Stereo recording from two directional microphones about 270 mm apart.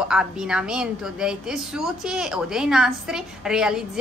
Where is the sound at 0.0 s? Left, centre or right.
Centre.